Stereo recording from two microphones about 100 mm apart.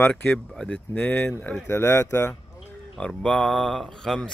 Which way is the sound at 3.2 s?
10° left (ahead or behind).